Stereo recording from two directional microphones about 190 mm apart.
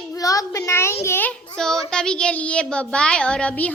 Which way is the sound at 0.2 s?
15° left (ahead or behind).